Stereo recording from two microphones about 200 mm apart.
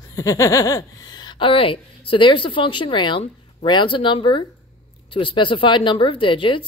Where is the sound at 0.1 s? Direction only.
15° left (ahead or behind).